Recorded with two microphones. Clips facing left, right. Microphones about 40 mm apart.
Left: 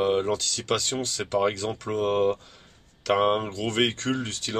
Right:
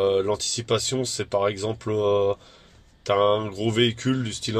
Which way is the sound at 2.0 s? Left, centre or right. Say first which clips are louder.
Right 2 dB; centre.